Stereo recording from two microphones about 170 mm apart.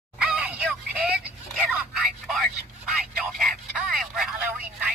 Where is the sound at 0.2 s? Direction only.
5° right (ahead or behind).